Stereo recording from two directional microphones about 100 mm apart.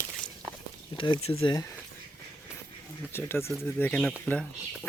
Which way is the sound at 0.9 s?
55° left (ahead or behind).